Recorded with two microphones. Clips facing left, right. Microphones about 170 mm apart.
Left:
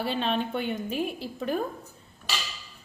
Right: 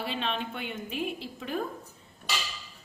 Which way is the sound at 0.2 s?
40° left (ahead or behind).